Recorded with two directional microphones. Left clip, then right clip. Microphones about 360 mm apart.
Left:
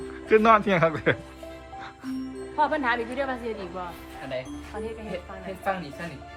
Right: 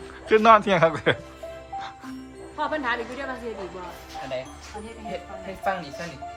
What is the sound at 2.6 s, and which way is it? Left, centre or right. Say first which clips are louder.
Speech: left 2 dB; centre.